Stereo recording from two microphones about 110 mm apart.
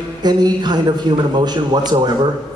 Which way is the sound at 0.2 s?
40° right (ahead or behind).